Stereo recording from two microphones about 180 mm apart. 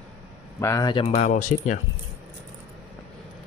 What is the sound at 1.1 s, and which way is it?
Speech, 40° left (ahead or behind).